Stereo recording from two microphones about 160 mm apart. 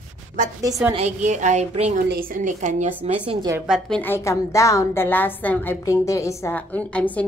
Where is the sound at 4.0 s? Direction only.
15° left (ahead or behind).